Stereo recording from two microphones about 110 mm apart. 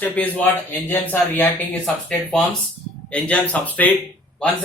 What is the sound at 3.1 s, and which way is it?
Speech, 15° left (ahead or behind).